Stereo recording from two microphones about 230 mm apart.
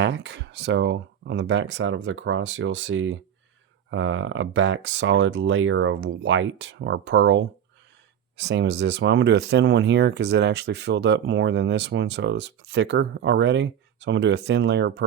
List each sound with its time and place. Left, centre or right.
0.0 s speech: right